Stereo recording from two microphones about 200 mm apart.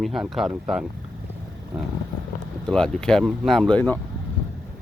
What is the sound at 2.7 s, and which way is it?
Speech, 5° left (ahead or behind).